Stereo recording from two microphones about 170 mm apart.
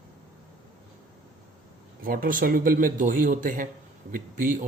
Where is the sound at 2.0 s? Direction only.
55° right (ahead or behind).